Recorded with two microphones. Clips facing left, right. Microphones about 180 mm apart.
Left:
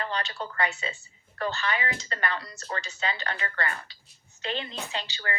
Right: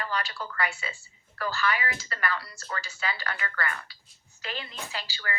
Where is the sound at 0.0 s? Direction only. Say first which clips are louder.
Left 1 dB; 25° left (ahead or behind).